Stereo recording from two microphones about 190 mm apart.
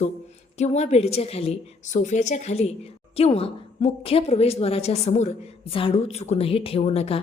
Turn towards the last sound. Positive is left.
turn(degrees=35)  # may be behind; listen again after turning